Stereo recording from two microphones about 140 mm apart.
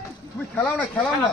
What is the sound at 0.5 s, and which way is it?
Speech, 10° left (ahead or behind).